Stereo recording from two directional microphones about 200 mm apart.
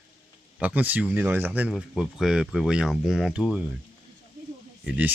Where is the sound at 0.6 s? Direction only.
5° right (ahead or behind).